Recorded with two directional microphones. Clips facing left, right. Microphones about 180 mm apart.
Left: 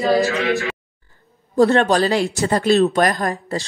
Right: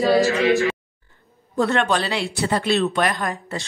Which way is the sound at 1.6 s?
35° left (ahead or behind).